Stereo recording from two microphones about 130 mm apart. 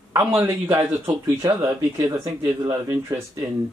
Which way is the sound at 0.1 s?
10° right (ahead or behind).